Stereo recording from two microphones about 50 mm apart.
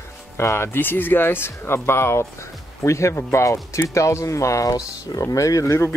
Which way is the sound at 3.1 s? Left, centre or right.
Left.